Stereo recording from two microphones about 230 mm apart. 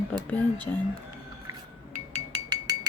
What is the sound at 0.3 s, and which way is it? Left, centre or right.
Speech, centre.